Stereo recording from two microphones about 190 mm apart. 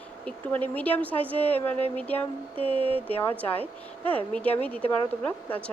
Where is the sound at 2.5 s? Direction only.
30° right (ahead or behind).